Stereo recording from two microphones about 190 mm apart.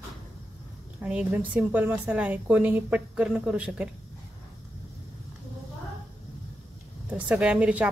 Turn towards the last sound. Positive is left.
turn(degrees=-5)  # may be behind; listen again after turning